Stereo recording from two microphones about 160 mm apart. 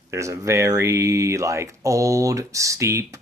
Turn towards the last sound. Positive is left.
turn(degrees=-15)  # may be behind; listen again after turning